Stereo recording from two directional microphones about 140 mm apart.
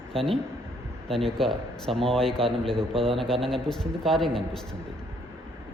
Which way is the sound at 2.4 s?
40° right (ahead or behind).